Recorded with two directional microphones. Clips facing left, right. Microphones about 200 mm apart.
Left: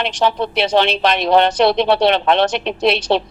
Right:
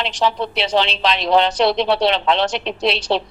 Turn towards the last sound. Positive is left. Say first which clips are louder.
# left 3 dB
turn(degrees=55)  # may be behind; listen again after turning